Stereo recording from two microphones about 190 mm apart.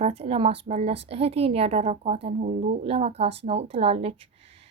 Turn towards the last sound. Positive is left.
turn(degrees=-30)  # may be behind; listen again after turning